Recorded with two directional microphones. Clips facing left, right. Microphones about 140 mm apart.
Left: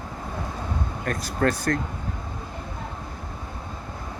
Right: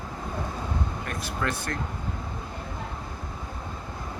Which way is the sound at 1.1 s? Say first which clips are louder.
Left 9 dB; 40° left (ahead or behind).